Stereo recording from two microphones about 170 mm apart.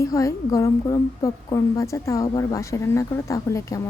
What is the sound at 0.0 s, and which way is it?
A woman's voice, 20° left (ahead or behind).